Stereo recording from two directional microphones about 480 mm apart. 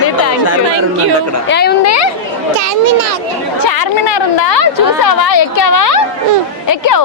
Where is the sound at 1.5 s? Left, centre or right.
Left.